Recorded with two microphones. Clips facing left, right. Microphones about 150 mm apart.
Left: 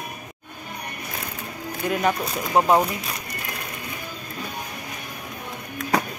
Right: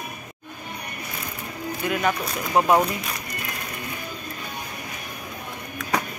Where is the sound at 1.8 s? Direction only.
35° left (ahead or behind).